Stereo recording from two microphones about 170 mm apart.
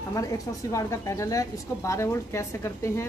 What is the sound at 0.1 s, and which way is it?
Speech, 20° left (ahead or behind).